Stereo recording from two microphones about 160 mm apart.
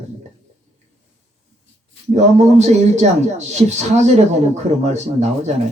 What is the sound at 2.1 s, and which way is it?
A man's voice, 45° right (ahead or behind).